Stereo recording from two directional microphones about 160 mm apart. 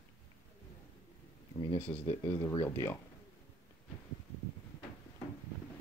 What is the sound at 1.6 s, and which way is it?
Speech, 35° left (ahead or behind).